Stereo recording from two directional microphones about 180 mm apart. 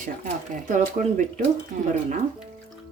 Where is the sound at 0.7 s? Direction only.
45° right (ahead or behind).